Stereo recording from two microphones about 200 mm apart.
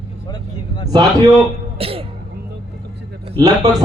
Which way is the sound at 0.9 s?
20° right (ahead or behind).